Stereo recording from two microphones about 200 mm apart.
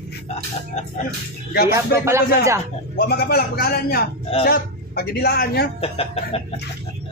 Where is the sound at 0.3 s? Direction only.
35° left (ahead or behind).